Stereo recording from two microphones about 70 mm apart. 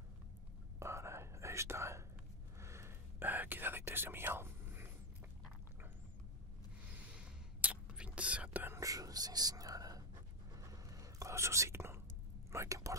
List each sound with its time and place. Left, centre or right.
0.7 s whispering: right
2.6 s gasp: right
3.2 s whispering: right
6.9 s whispering: right
8.7 s whispering: right